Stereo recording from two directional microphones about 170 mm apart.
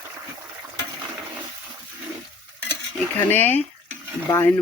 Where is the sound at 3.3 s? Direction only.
10° left (ahead or behind).